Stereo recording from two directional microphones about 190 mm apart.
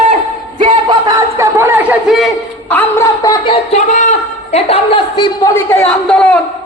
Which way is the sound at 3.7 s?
40° left (ahead or behind).